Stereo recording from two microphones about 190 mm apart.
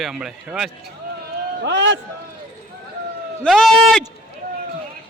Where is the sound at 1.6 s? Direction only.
70° right (ahead or behind).